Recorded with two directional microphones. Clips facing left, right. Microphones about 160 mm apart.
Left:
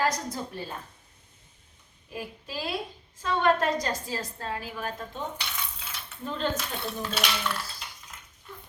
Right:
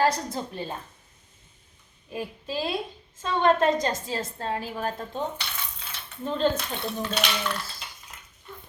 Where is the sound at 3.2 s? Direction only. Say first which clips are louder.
Right 3 dB; 25° right (ahead or behind).